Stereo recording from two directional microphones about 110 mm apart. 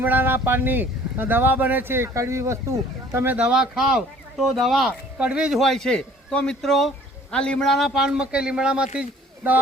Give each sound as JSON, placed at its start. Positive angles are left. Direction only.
{"t": 0.0, "sound": "speech", "side_deg": -20}
{"t": 3.3, "sound": "speech", "side_deg": -10}
{"t": 9.0, "sound": "a sound", "side_deg": -15}